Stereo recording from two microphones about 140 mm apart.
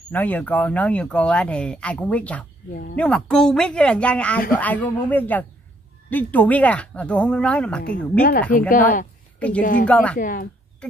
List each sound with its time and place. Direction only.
0.1 s speech: 10° left (ahead or behind)
8.5 s speech: 70° left (ahead or behind)
9.8 s speech: 10° left (ahead or behind)
10.1 s speech: 90° left
10.8 s speech: 10° left (ahead or behind)